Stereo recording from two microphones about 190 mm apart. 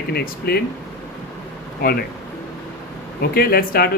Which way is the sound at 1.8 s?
50° left (ahead or behind).